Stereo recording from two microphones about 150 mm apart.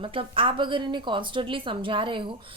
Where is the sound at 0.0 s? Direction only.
35° right (ahead or behind).